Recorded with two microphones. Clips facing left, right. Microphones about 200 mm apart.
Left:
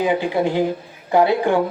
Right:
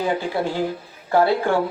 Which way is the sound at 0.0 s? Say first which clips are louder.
Left 4 dB; 15° left (ahead or behind).